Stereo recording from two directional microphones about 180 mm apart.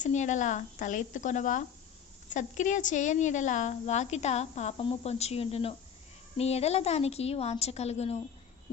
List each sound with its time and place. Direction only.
0.0 s a woman's voice: 40° left (ahead or behind)